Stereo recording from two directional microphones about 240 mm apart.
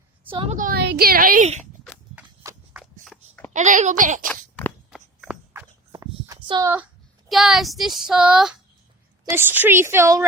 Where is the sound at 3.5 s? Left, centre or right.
Right.